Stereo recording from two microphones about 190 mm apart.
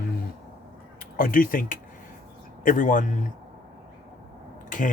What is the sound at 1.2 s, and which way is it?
Speech, 45° left (ahead or behind).